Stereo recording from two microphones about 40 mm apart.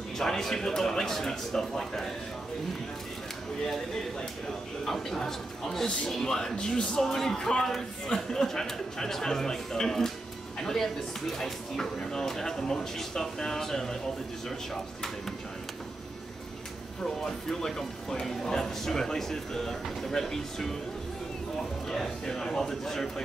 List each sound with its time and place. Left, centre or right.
0.2 s speech: centre
4.8 s a man's voice: centre; by 6.9 s left
6.9 s speech: centre
17.0 s speech: centre
21.8 s speech: centre